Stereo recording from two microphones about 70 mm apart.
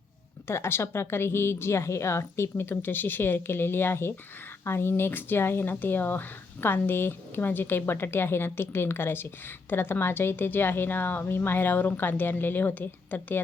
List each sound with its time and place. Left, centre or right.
0.4 s speech: left